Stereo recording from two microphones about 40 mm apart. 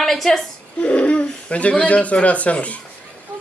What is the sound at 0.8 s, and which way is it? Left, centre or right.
Speech, left.